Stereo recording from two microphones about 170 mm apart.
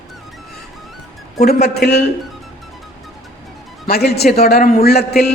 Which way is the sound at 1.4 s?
70° left (ahead or behind).